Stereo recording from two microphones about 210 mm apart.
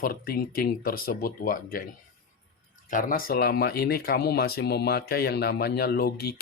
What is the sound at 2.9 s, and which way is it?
Speech, 45° left (ahead or behind).